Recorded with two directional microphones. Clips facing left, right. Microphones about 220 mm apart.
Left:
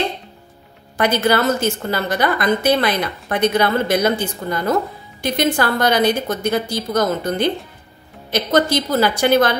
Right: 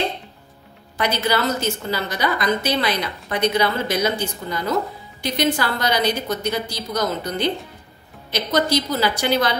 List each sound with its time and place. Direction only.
0.9 s a woman's voice: 50° left (ahead or behind)